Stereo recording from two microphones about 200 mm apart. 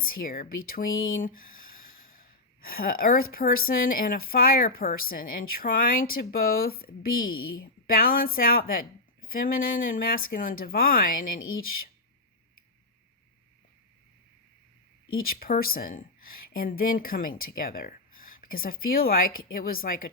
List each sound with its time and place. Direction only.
0.0 s speech: 45° left (ahead or behind)
1.2 s a sound: 45° left (ahead or behind)
2.6 s speech: 45° left (ahead or behind)
15.2 s speech: 45° left (ahead or behind)